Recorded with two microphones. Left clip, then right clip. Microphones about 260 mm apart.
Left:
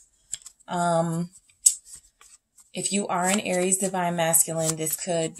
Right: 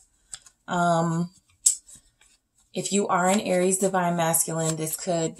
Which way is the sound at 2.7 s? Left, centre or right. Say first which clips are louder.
Right 3 dB; left.